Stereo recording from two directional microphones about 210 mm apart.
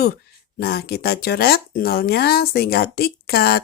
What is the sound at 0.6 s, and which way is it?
Speech, 50° left (ahead or behind).